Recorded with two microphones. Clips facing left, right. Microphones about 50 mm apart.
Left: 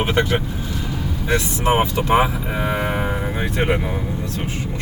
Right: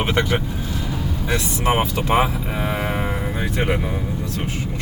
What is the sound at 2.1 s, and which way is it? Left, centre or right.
Speech, centre.